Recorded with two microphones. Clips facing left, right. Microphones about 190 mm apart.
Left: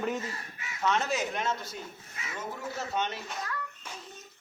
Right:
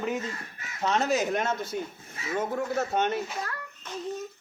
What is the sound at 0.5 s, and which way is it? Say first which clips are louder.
Speech: right 2 dB; 40° right (ahead or behind).